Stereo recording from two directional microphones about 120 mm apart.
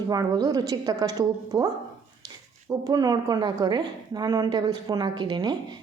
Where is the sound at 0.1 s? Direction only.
30° right (ahead or behind).